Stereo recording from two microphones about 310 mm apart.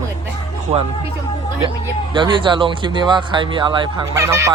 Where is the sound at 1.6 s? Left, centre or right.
Centre.